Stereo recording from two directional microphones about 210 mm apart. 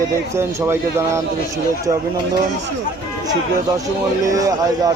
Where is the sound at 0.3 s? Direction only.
10° right (ahead or behind).